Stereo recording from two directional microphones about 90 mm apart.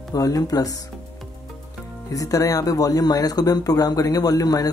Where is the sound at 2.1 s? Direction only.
40° left (ahead or behind).